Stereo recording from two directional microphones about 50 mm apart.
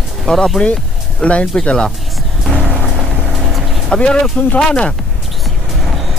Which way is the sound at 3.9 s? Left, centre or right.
Centre.